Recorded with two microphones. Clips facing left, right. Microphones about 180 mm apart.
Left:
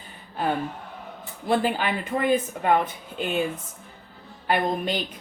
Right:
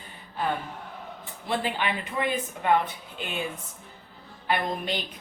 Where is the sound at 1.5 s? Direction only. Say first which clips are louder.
Left 5 dB; 45° left (ahead or behind).